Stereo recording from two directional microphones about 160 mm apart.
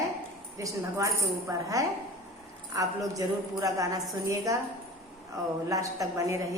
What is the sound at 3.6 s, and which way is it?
Speech, 20° right (ahead or behind).